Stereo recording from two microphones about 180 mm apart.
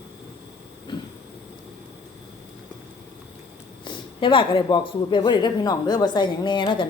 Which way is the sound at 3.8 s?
25° left (ahead or behind).